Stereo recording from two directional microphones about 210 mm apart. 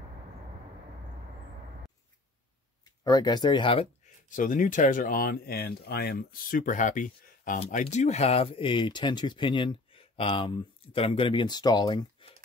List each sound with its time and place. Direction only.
3.0 s speech: 20° left (ahead or behind)